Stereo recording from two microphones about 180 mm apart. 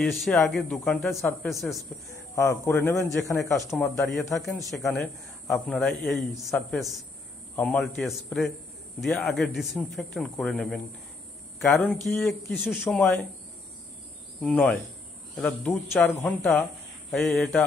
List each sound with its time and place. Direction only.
0.0 s a man's voice: centre (ahead or behind)
2.3 s speech: 15° left (ahead or behind)
4.0 s a man's voice: centre (ahead or behind)
14.4 s a man's voice: 5° left (ahead or behind)